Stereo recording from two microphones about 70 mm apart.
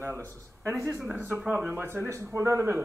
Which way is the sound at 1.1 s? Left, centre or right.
Right.